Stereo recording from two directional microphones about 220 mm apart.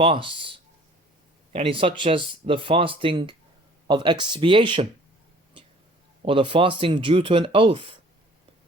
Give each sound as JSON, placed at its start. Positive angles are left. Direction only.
{"t": 0.0, "sound": "speech", "side_deg": -25}
{"t": 6.2, "sound": "speech", "side_deg": -25}